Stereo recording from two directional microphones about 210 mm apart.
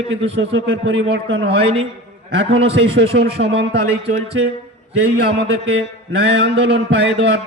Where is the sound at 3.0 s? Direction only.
55° right (ahead or behind).